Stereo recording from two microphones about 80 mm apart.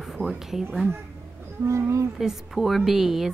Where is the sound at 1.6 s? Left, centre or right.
Right.